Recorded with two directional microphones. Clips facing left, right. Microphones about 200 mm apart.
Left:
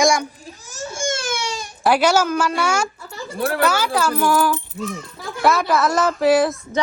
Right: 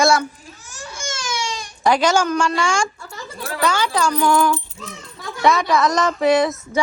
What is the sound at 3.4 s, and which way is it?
Speech, 60° left (ahead or behind).